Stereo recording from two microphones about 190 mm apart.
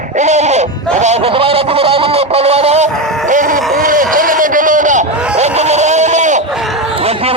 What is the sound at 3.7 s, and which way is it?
Speech, 45° right (ahead or behind).